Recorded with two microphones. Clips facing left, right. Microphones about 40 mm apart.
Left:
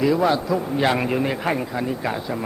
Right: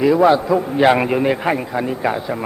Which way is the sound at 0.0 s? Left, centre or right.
Centre.